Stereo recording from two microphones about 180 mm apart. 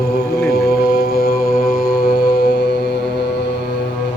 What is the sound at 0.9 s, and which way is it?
Mantra, 60° left (ahead or behind).